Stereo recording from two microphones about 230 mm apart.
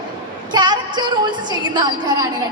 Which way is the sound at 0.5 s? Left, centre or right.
Centre.